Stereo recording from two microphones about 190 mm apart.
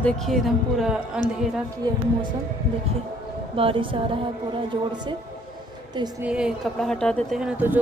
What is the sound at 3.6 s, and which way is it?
A woman's voice, 30° right (ahead or behind).